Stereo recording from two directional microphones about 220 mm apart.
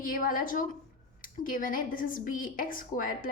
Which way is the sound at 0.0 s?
40° left (ahead or behind).